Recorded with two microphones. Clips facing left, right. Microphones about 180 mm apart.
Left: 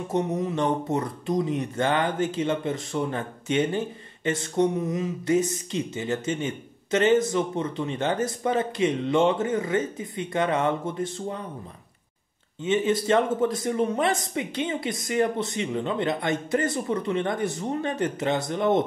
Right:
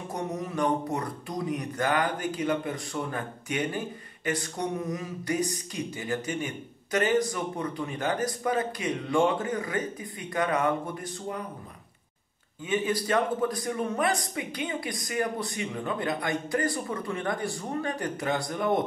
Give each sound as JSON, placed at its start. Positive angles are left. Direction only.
{"t": 0.1, "sound": "speech", "side_deg": 25}
{"t": 12.6, "sound": "speech", "side_deg": 25}